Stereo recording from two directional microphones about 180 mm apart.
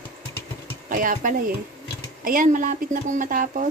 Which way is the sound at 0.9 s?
50° right (ahead or behind).